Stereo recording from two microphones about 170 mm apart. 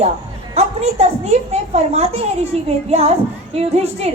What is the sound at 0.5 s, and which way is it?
A woman's voice, 40° right (ahead or behind).